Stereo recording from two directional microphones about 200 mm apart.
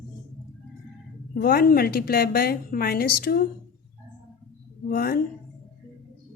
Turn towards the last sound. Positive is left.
turn(degrees=50)  # may be behind; listen again after turning